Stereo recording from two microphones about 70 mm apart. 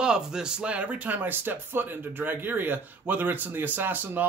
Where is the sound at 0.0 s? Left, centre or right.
Centre.